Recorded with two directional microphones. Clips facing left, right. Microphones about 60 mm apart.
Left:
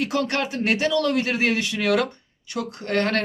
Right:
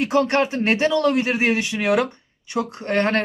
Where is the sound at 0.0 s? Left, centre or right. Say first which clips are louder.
Right 5 dB; right.